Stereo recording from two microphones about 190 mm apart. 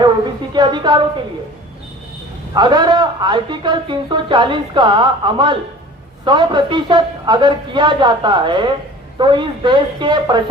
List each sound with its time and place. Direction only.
0.5 s a man's voice: 25° right (ahead or behind)
2.6 s a man's voice: 20° right (ahead or behind)